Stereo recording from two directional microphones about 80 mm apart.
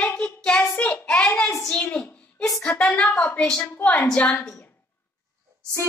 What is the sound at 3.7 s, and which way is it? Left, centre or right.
Speech, left.